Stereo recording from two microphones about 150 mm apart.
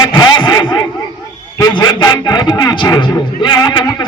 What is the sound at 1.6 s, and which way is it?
A man's voice, 30° left (ahead or behind).